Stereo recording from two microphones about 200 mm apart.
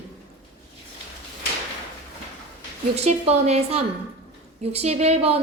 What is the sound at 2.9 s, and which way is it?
A woman's voice, 30° right (ahead or behind).